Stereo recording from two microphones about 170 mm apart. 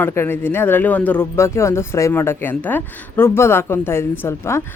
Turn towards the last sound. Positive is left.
turn(degrees=15)  # may be behind; listen again after turning